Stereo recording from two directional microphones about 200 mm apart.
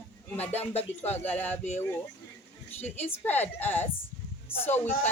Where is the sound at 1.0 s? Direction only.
10° left (ahead or behind).